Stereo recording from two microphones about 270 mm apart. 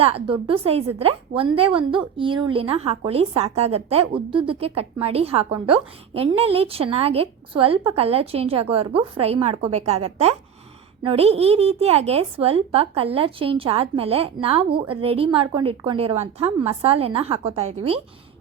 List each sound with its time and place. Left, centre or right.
0.0 s a woman's voice: right